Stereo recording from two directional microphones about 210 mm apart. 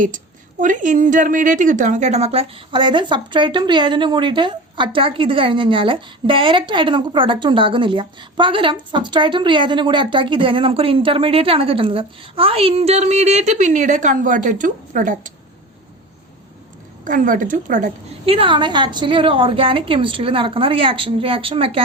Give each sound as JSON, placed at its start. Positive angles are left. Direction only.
{"t": 0.6, "sound": "a woman's voice", "side_deg": -40}
{"t": 17.0, "sound": "a woman's voice", "side_deg": -40}